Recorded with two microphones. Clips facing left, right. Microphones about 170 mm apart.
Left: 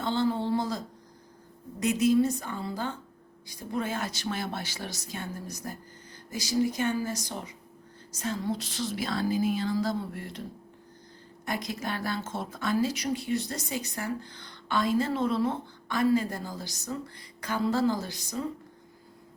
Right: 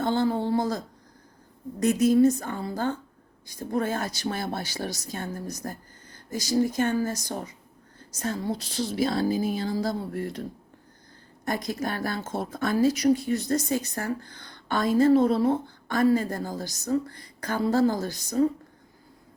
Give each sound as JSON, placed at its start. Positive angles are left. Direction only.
{"t": 0.0, "sound": "a sound", "side_deg": -50}
{"t": 1.8, "sound": "speech", "side_deg": -45}
{"t": 11.4, "sound": "speech", "side_deg": -45}